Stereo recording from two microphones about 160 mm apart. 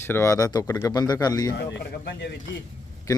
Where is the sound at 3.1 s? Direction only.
20° left (ahead or behind).